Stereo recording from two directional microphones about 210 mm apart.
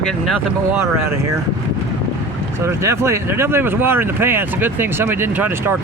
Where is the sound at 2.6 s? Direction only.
15° right (ahead or behind).